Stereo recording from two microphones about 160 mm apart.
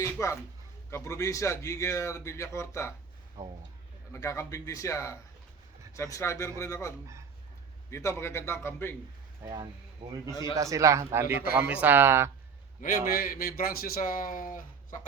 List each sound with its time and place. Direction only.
0.0 s a man's voice: 20° left (ahead or behind)
3.4 s a man's voice: 20° right (ahead or behind)
4.1 s a man's voice: 20° left (ahead or behind)
9.4 s a man's voice: 20° right (ahead or behind)
13.1 s speech: 65° left (ahead or behind)